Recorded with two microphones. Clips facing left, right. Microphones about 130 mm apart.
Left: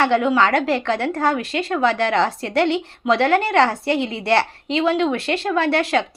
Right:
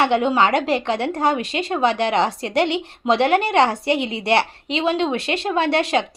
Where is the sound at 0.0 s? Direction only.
20° right (ahead or behind).